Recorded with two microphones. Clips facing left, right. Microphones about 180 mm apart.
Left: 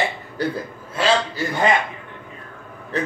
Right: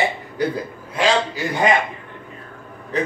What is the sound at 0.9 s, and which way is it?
Speech, 15° right (ahead or behind).